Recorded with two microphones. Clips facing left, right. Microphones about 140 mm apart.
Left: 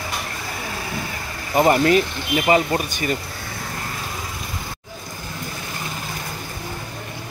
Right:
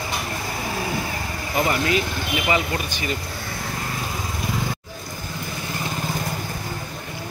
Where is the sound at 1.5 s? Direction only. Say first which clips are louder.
Left 6 dB; 45° left (ahead or behind).